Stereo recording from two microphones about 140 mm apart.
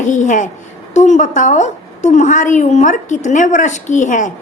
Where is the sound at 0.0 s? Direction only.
65° left (ahead or behind).